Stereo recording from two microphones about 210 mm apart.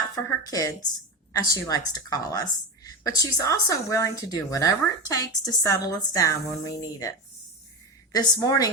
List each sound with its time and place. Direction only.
0.2 s speech: 15° left (ahead or behind)
8.1 s speech: 15° left (ahead or behind)